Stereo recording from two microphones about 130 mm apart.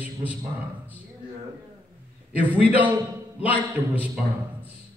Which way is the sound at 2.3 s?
10° right (ahead or behind).